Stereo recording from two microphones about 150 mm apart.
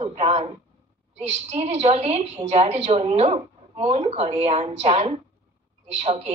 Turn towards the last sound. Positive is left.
turn(degrees=-45)  # may be behind; listen again after turning